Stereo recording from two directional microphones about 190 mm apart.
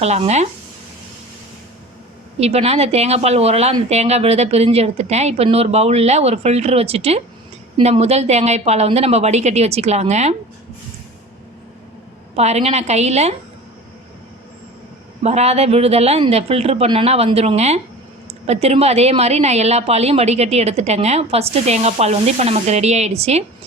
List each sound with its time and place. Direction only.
0.0 s a woman's voice: 35° right (ahead or behind)
2.4 s a woman's voice: 35° right (ahead or behind)
12.4 s a woman's voice: 35° right (ahead or behind)
15.2 s a woman's voice: 35° right (ahead or behind)